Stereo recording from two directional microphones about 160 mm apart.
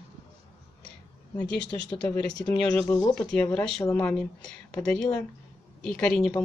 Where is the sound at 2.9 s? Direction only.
20° left (ahead or behind).